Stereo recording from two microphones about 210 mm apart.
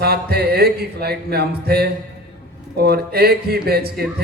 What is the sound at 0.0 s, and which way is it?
Speech, 50° right (ahead or behind).